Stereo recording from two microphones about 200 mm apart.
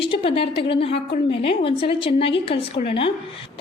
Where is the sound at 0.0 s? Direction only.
25° left (ahead or behind).